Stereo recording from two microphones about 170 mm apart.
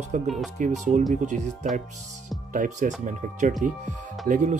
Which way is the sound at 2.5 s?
50° right (ahead or behind).